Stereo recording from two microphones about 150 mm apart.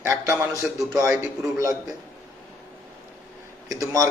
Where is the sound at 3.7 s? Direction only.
20° right (ahead or behind).